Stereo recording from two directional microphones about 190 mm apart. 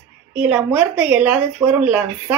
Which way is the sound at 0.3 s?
5° right (ahead or behind).